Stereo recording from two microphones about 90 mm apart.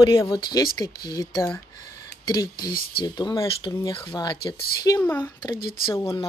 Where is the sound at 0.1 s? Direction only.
40° left (ahead or behind).